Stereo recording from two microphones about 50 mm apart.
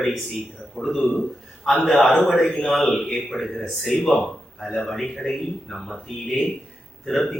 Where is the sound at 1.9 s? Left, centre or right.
Centre.